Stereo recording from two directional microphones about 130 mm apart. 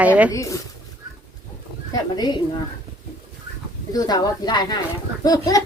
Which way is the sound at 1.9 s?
30° left (ahead or behind).